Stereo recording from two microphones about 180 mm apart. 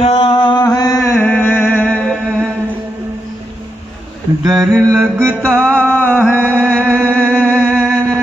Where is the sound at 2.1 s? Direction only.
10° right (ahead or behind).